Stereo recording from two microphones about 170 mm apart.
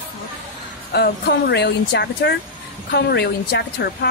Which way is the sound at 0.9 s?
70° left (ahead or behind).